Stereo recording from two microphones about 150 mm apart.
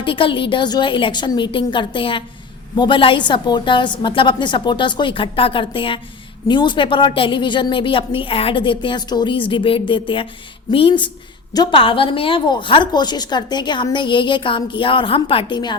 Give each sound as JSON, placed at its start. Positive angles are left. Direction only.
{"t": 0.0, "sound": "a woman's voice", "side_deg": 35}